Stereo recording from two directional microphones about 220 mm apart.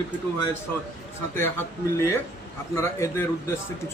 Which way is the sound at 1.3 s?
10° left (ahead or behind).